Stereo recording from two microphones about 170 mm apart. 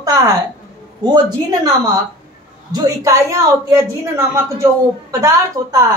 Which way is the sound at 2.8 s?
20° right (ahead or behind).